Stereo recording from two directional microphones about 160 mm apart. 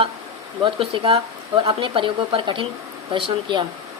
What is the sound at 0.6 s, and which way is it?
Speech, 35° right (ahead or behind).